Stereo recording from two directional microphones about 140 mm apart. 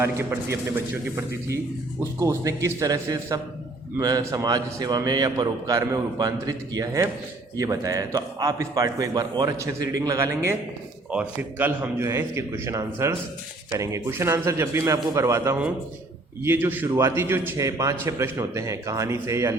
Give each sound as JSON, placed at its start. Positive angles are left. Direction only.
{"t": 0.0, "sound": "a man's voice", "side_deg": -20}
{"t": 2.0, "sound": "a man's voice", "side_deg": -20}
{"t": 11.1, "sound": "a man's voice", "side_deg": -10}